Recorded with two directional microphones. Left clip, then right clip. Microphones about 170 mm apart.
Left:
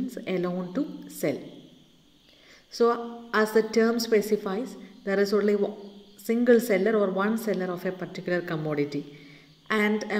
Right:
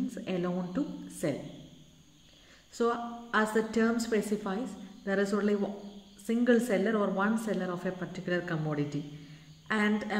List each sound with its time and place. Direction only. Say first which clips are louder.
0.1 s a woman's voice: left 5 dB; 20° left (ahead or behind)
2.8 s a woman's voice: left 7 dB; 20° left (ahead or behind)